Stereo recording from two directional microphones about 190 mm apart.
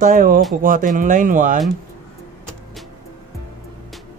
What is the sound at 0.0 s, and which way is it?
Speech, 45° right (ahead or behind).